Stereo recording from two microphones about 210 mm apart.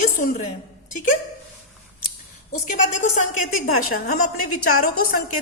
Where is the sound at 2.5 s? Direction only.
40° left (ahead or behind).